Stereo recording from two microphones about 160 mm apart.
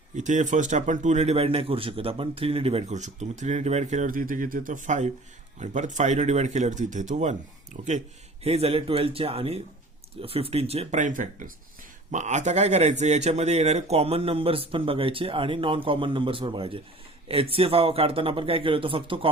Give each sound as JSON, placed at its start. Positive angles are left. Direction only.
{"t": 0.2, "sound": "speech", "side_deg": -50}
{"t": 8.4, "sound": "speech", "side_deg": -40}